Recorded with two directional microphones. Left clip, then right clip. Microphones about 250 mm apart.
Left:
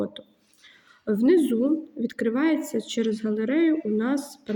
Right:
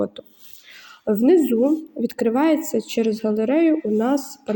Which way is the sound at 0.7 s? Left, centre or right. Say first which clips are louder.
Right 5 dB; centre.